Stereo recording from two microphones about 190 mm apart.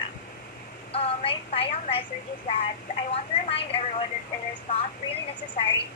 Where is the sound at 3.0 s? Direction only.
30° left (ahead or behind).